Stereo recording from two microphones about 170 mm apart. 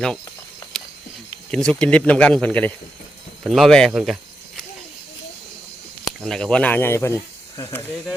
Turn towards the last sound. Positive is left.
turn(degrees=15)  # may be behind; listen again after turning